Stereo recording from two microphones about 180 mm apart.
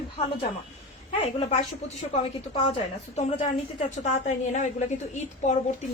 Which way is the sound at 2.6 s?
35° left (ahead or behind).